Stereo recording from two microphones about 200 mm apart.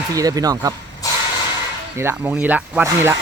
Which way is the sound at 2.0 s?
10° right (ahead or behind).